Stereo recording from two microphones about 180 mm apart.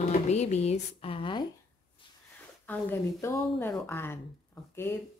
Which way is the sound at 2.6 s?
10° left (ahead or behind).